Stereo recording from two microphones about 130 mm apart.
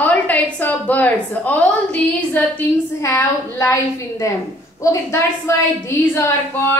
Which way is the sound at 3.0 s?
25° left (ahead or behind).